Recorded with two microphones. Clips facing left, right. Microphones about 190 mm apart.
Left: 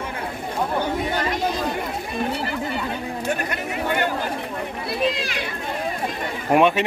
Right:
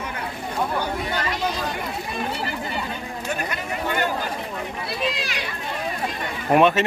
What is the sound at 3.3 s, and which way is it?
Chatter, 60° left (ahead or behind).